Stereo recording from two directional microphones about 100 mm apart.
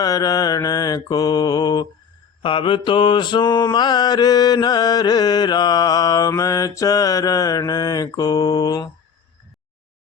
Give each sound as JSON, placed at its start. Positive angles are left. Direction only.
{"t": 0.0, "sound": "mantra", "side_deg": 40}
{"t": 2.4, "sound": "mantra", "side_deg": 60}